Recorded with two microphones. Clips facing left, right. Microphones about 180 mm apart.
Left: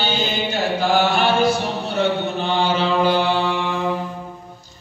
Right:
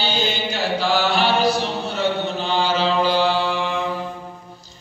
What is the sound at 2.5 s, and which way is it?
Mantra, 60° left (ahead or behind).